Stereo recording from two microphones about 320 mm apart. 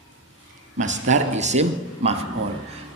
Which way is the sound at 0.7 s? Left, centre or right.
Right.